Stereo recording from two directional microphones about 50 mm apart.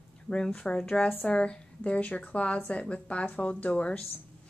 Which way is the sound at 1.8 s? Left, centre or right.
Left.